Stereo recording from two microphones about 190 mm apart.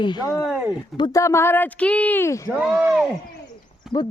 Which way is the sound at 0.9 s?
20° left (ahead or behind).